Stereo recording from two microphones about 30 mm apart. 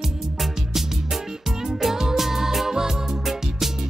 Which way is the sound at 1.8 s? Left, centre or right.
Centre.